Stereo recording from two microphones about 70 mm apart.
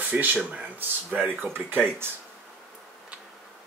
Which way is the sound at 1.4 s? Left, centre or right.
Right.